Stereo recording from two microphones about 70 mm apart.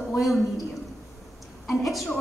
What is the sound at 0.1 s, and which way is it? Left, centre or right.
Speech, centre.